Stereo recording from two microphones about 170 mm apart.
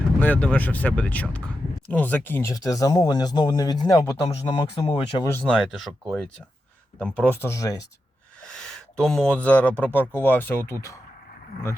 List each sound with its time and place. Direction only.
0.2 s speech: 10° left (ahead or behind); by 5.3 s 25° left (ahead or behind)
5.3 s speech: 5° left (ahead or behind)
8.4 s speech: 5° left (ahead or behind)